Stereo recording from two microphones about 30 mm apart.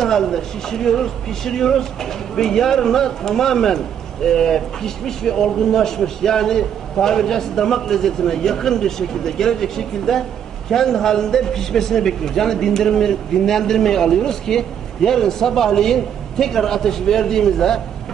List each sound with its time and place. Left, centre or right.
0.0 s a man's voice: centre